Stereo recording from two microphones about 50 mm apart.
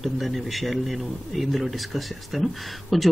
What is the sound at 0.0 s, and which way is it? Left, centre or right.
Speech, centre.